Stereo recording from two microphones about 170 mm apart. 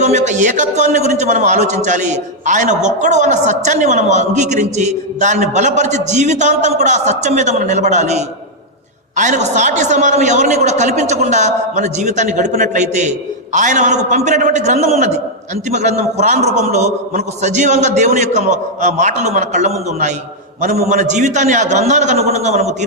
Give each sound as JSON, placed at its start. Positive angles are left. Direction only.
{"t": 0.0, "sound": "a man's voice", "side_deg": -45}